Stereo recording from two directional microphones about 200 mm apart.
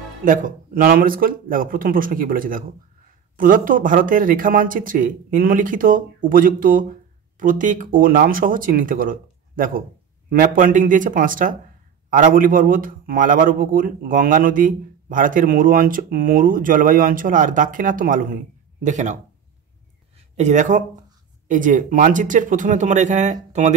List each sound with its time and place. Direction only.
0.2 s a man's voice: 40° right (ahead or behind)
20.3 s speech: 35° right (ahead or behind)